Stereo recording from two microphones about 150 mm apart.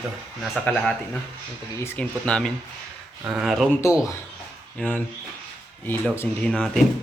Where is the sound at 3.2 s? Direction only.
5° right (ahead or behind).